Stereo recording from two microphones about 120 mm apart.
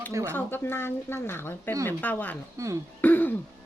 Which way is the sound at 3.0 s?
15° left (ahead or behind).